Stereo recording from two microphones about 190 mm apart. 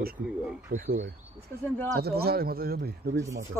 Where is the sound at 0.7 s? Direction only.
50° right (ahead or behind).